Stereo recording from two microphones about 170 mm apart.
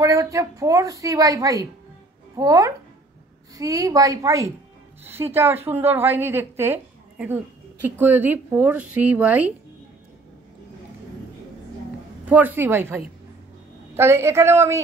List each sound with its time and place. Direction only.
0.0 s a woman's voice: 20° right (ahead or behind)
12.3 s a woman's voice: 10° right (ahead or behind)